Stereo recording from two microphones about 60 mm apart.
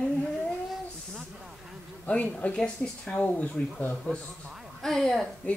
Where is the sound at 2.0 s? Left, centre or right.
Left.